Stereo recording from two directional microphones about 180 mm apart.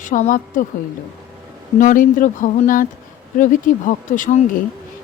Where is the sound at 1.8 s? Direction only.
45° left (ahead or behind).